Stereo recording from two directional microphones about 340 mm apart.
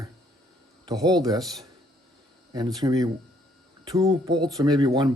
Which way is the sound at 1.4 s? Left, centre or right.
Centre.